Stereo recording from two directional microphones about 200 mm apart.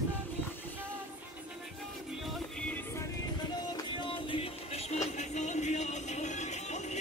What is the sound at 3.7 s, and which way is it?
Music, 25° left (ahead or behind).